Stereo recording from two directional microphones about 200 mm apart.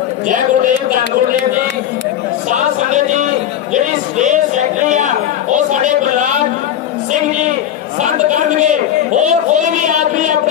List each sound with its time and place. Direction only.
0.3 s speech: 40° right (ahead or behind)
2.5 s a sound: 35° right (ahead or behind)
8.0 s chatter: 40° right (ahead or behind)
9.2 s speech: 35° right (ahead or behind)